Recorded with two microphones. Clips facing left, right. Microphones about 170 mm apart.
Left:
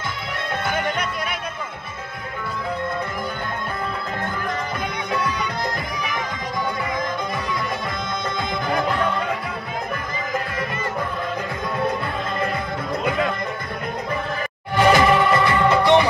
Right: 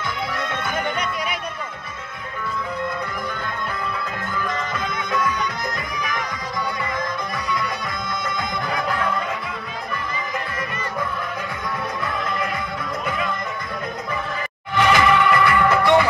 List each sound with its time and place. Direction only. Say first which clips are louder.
14.8 s music: left 2 dB; 35° left (ahead or behind)